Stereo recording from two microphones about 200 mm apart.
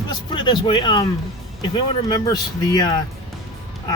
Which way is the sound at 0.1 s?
25° left (ahead or behind).